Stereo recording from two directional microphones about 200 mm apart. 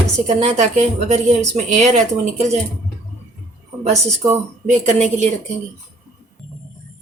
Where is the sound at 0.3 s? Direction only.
35° right (ahead or behind).